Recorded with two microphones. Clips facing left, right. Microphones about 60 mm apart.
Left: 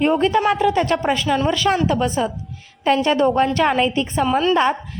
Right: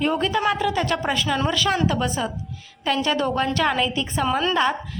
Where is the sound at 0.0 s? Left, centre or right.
Left.